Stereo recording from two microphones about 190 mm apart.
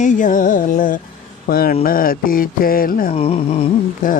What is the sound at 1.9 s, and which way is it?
Mantra, 50° left (ahead or behind).